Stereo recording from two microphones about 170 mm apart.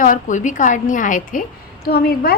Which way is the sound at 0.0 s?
50° left (ahead or behind).